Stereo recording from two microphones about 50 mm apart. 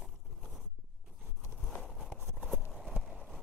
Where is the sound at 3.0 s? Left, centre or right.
Centre.